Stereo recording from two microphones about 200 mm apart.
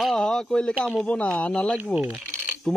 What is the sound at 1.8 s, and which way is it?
Coin, 5° right (ahead or behind).